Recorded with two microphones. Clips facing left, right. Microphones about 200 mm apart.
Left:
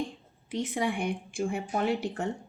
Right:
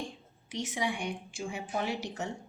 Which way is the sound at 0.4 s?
55° left (ahead or behind).